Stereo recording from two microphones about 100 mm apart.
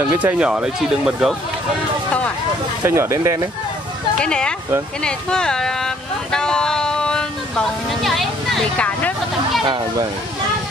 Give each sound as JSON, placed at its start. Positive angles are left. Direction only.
{"t": 0.2, "sound": "speech", "side_deg": -15}
{"t": 2.8, "sound": "speech", "side_deg": -25}
{"t": 4.2, "sound": "speech", "side_deg": 10}
{"t": 6.3, "sound": "a sound", "side_deg": 5}
{"t": 8.7, "sound": "vehicle", "side_deg": 15}